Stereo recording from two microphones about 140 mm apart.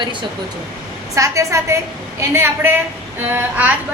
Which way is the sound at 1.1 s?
20° right (ahead or behind).